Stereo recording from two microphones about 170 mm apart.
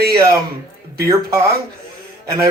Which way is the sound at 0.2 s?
20° right (ahead or behind).